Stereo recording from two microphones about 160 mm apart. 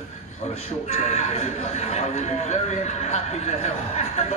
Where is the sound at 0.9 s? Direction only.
40° left (ahead or behind).